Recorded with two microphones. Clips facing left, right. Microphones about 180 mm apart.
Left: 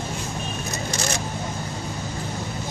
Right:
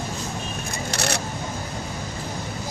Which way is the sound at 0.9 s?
65° right (ahead or behind).